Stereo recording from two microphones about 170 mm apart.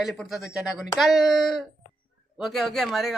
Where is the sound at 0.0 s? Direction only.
Centre (ahead or behind).